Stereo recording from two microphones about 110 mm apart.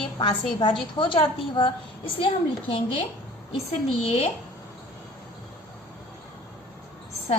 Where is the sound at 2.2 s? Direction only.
55° left (ahead or behind).